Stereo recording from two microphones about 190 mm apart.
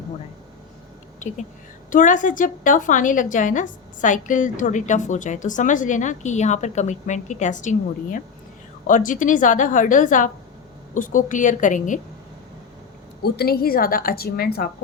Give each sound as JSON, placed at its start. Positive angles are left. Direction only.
{"t": 1.9, "sound": "a woman's voice", "side_deg": 45}
{"t": 13.2, "sound": "a woman's voice", "side_deg": 55}